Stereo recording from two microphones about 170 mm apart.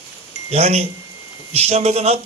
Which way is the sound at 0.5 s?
40° right (ahead or behind).